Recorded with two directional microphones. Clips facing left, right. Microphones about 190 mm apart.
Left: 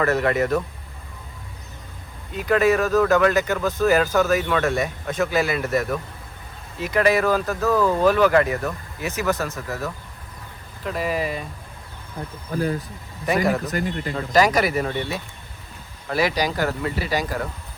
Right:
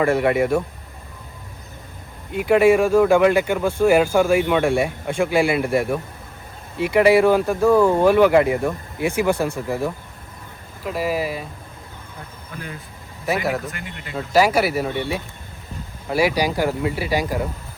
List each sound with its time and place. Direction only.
0.0 s speech: 10° right (ahead or behind)
2.3 s speech: 15° right (ahead or behind)
12.5 s speech: 40° left (ahead or behind)
13.2 s speech: 5° right (ahead or behind)
13.7 s speech: 40° left (ahead or behind)
14.1 s speech: 5° right (ahead or behind)